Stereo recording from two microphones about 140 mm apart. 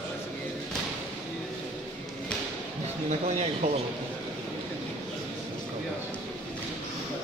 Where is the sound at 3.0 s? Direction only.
60° right (ahead or behind).